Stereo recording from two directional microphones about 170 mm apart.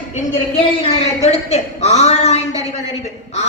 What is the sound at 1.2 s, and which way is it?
Speech, 40° left (ahead or behind).